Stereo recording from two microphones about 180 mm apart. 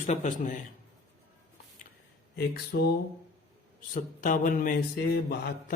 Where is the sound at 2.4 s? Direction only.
60° left (ahead or behind).